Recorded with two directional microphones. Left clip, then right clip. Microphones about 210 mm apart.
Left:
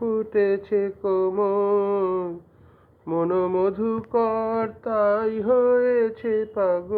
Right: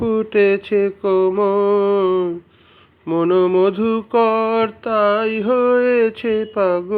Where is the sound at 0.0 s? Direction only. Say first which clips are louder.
Right 6 dB; 35° right (ahead or behind).